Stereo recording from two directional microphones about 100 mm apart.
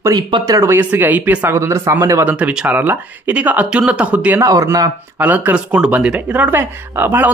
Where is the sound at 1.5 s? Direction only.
30° right (ahead or behind).